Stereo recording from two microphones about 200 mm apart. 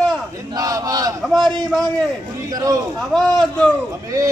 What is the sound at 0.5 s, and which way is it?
Chant, 15° right (ahead or behind).